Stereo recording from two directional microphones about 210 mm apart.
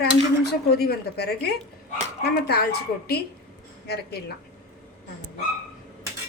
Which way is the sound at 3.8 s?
50° left (ahead or behind).